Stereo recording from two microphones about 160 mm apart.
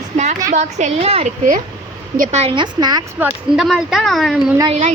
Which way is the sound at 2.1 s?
55° right (ahead or behind).